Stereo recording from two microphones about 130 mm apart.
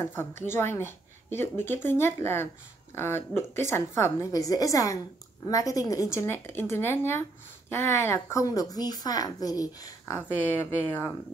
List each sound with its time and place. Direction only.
0.0 s a woman's voice: 20° left (ahead or behind)
10.1 s speech: 15° left (ahead or behind)